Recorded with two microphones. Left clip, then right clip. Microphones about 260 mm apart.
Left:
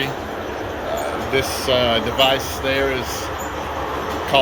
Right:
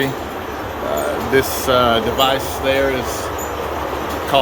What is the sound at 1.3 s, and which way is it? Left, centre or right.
Speech, centre.